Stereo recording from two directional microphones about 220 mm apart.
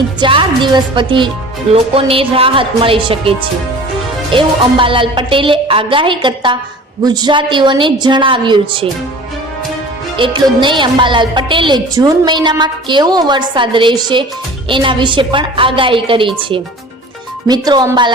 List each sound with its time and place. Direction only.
0.2 s speech: 20° right (ahead or behind)
10.2 s speech: 20° right (ahead or behind)